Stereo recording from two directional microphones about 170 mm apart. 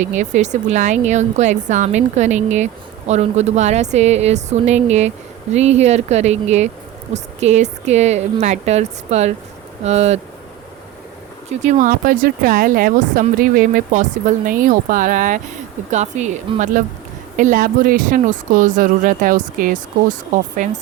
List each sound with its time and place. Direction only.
0.2 s speech: 45° right (ahead or behind)
11.6 s speech: 50° right (ahead or behind)